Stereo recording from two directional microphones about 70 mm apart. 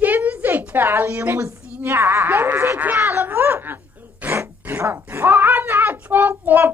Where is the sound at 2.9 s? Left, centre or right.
Right.